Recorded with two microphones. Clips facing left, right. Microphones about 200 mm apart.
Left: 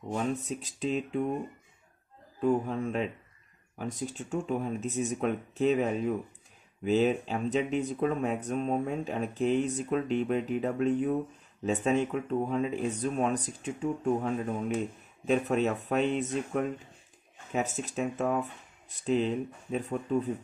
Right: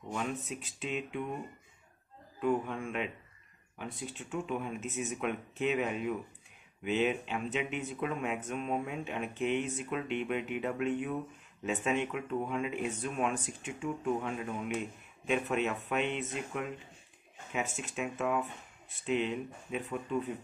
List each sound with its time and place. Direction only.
0.1 s speech: 35° left (ahead or behind)
2.4 s speech: 35° left (ahead or behind)